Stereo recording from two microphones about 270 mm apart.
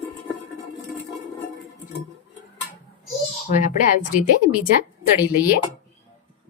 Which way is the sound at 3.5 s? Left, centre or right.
Left.